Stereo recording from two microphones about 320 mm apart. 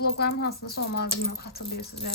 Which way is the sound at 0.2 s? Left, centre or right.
Left.